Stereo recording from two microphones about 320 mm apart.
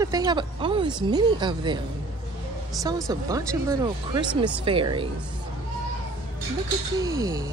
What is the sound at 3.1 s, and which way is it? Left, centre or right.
A woman's voice, centre.